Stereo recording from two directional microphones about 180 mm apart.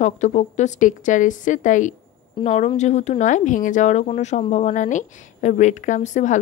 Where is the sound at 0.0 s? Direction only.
40° left (ahead or behind).